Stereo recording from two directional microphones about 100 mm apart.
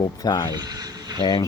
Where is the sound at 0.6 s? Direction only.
40° right (ahead or behind).